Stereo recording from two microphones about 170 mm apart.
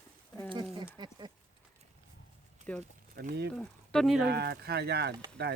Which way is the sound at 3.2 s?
60° right (ahead or behind).